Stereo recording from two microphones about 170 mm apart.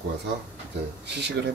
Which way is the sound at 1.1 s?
80° right.